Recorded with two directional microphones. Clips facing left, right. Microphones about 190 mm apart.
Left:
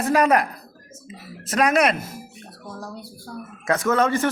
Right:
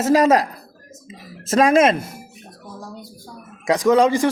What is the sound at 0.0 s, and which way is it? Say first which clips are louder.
Speech: right 4 dB; 20° right (ahead or behind).